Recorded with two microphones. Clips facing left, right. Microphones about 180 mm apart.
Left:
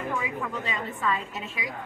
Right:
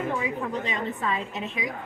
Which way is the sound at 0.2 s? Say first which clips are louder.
Right 3 dB; 30° right (ahead or behind).